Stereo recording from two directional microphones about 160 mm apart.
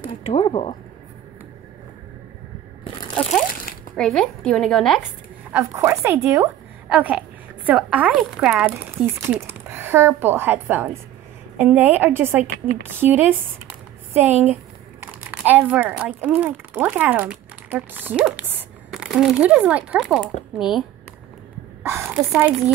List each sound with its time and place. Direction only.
0.0 s speech: 40° left (ahead or behind)
2.8 s crunch: 30° left (ahead or behind)
3.2 s a woman's voice: 5° left (ahead or behind)
5.5 s a woman's voice: 15° right (ahead or behind)
22.0 s speech: 10° right (ahead or behind)